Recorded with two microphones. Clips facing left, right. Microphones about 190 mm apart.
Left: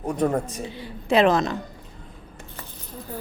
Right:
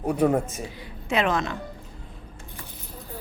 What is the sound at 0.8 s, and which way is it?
Speech, 35° left (ahead or behind).